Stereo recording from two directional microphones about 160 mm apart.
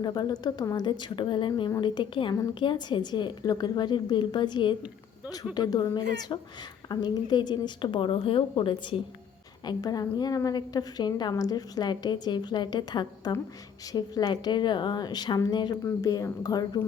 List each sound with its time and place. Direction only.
0.0 s a woman's voice: 25° left (ahead or behind)